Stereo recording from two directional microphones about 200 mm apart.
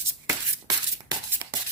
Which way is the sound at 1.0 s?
20° right (ahead or behind).